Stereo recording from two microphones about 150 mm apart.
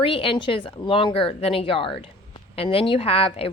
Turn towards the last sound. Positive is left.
turn(degrees=40)  # may be behind; listen again after turning